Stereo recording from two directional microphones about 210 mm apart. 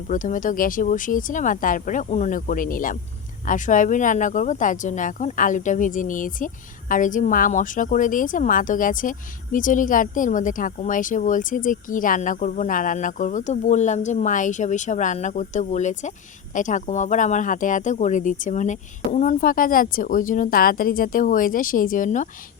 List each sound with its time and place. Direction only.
0.1 s speech: 40° left (ahead or behind)